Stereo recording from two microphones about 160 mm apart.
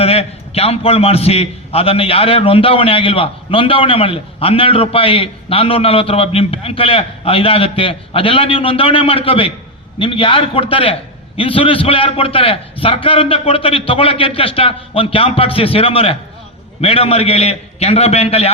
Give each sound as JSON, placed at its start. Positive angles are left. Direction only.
{"t": 0.0, "sound": "a man's voice", "side_deg": 40}